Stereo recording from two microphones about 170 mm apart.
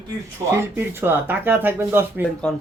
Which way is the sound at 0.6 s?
15° right (ahead or behind).